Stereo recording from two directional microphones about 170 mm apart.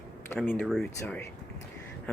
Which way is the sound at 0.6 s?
Centre (ahead or behind).